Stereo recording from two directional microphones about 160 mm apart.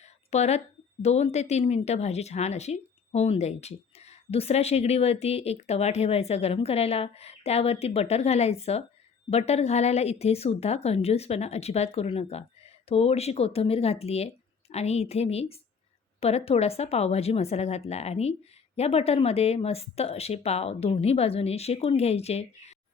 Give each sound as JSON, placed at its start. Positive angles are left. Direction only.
{"t": 0.3, "sound": "a woman's voice", "side_deg": 45}